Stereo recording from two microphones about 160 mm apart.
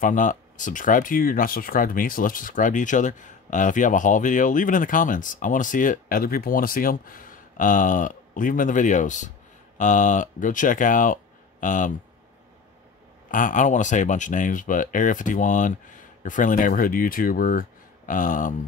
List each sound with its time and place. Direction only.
0.0 s speech: 55° left (ahead or behind)
13.3 s speech: 55° left (ahead or behind)